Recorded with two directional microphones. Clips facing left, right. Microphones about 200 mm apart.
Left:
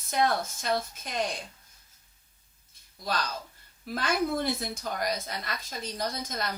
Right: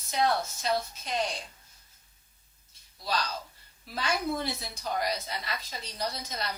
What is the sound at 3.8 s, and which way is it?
A woman's voice, 50° left (ahead or behind).